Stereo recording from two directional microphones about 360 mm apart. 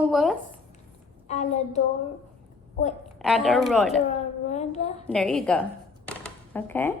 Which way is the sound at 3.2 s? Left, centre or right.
Centre.